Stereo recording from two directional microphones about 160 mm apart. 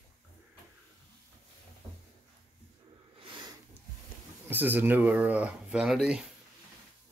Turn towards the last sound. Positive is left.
turn(degrees=-5)  # may be behind; listen again after turning